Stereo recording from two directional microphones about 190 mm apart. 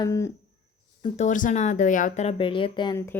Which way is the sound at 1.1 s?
40° left (ahead or behind).